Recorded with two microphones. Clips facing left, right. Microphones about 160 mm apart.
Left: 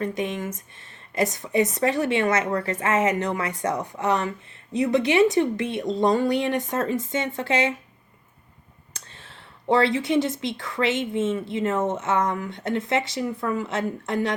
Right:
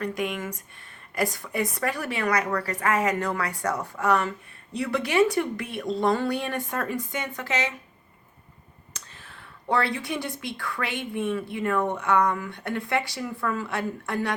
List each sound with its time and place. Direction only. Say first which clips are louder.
0.0 s speech: left 2 dB; 20° left (ahead or behind)
8.9 s speech: left 1 dB; 25° left (ahead or behind)